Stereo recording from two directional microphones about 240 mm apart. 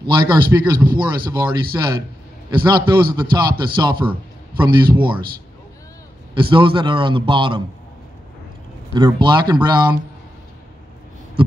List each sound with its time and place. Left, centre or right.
0.1 s a man's voice: centre
6.3 s a man's voice: right
8.9 s speech: centre